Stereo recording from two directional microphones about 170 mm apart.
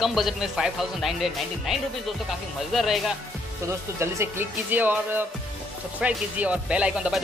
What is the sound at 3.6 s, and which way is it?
Speech, 15° right (ahead or behind).